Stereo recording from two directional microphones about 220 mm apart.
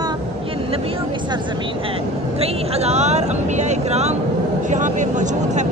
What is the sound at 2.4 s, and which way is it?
Speech, 30° right (ahead or behind).